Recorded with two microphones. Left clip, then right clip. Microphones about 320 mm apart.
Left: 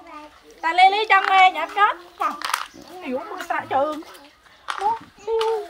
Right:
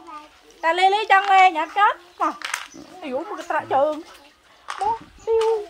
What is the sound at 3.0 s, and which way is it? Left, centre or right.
Speech, right.